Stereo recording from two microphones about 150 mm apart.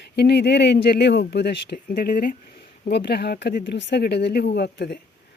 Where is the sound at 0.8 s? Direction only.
90° left; by 2.4 s 70° left (ahead or behind).